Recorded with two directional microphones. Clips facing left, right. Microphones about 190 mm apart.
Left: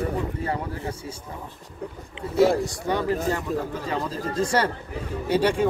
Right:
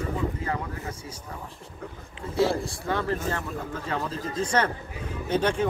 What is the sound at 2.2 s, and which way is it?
Speech, 35° left (ahead or behind).